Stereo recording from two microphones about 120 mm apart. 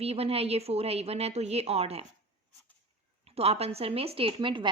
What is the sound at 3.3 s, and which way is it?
Speech, 60° right (ahead or behind).